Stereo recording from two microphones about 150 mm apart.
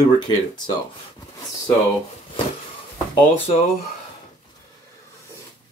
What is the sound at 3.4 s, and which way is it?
Speech, 40° left (ahead or behind).